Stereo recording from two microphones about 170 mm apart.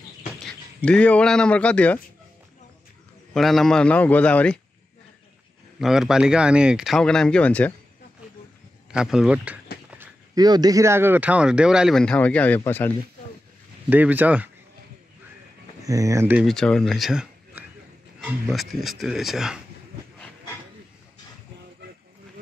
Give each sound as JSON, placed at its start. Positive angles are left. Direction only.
{"t": 0.8, "sound": "a man's voice", "side_deg": 5}
{"t": 3.3, "sound": "a man's voice", "side_deg": 0}
{"t": 5.8, "sound": "speech", "side_deg": 0}
{"t": 8.9, "sound": "speech", "side_deg": -5}
{"t": 10.3, "sound": "speech", "side_deg": -25}
{"t": 13.8, "sound": "speech", "side_deg": -10}
{"t": 15.8, "sound": "speech", "side_deg": -20}
{"t": 16.4, "sound": "speech", "side_deg": 5}